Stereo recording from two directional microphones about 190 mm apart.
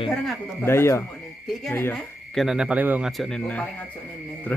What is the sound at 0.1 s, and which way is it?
Speech, centre (ahead or behind).